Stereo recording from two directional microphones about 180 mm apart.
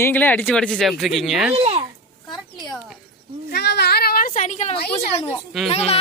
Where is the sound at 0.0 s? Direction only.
10° left (ahead or behind).